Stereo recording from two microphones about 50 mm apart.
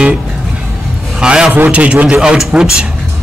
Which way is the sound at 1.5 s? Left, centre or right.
Right.